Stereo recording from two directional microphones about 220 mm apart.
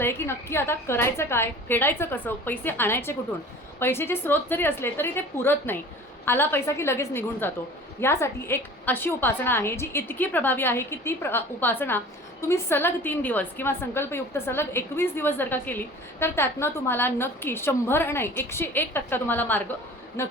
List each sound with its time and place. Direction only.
0.0 s a woman's voice: 10° left (ahead or behind)